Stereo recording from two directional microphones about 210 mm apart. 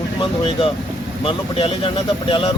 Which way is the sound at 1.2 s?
25° left (ahead or behind).